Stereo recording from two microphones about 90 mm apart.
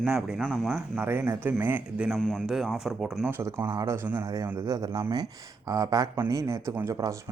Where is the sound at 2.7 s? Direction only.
5° right (ahead or behind).